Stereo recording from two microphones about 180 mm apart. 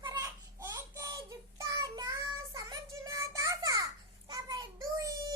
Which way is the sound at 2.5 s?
20° right (ahead or behind).